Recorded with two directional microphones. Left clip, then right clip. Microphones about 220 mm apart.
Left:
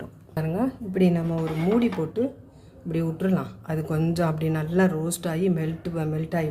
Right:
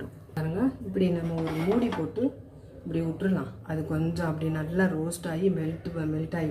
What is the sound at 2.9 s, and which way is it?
Speech, 55° left (ahead or behind).